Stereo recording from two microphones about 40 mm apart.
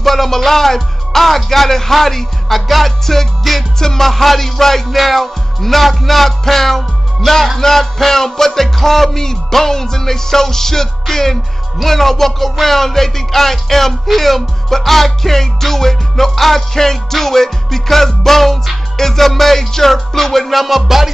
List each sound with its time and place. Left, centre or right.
0.0 s speech: centre
7.2 s music: centre